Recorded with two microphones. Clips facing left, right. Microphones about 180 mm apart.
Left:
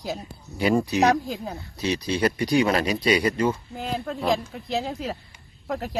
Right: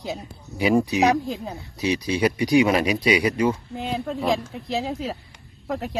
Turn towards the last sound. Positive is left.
turn(degrees=0)  # may be behind; listen again after turning